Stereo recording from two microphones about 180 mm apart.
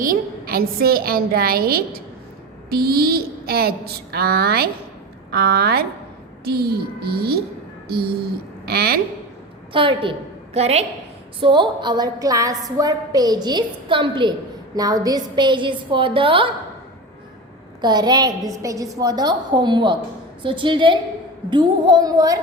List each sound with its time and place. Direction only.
0.0 s a woman's voice: 55° right (ahead or behind)
8.6 s a woman's voice: 60° right (ahead or behind)
9.7 s a woman's voice: 30° right (ahead or behind)
17.7 s a woman's voice: 25° right (ahead or behind)